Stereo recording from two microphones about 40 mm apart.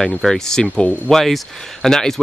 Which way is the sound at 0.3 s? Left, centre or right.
Centre.